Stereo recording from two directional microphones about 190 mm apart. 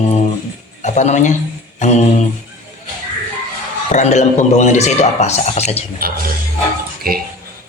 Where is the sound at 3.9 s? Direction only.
40° left (ahead or behind).